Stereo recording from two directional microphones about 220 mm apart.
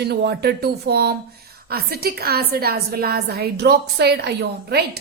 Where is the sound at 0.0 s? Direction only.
50° right (ahead or behind).